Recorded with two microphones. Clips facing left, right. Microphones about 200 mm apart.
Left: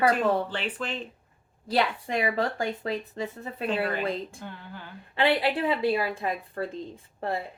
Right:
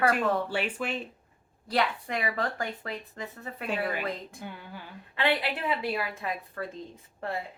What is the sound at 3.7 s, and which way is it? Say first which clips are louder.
Speech: left 3 dB; 10° right (ahead or behind).